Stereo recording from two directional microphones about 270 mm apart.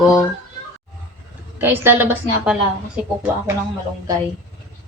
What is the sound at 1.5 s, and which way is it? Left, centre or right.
A woman's voice, centre.